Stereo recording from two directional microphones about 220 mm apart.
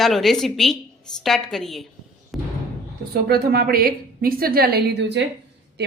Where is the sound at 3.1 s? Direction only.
45° right (ahead or behind).